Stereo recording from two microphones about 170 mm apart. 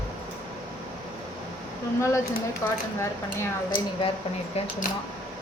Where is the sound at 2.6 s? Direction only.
15° left (ahead or behind).